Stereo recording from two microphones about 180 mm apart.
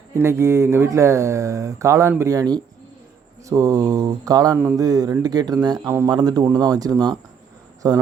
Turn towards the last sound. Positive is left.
turn(degrees=-20)  # may be behind; listen again after turning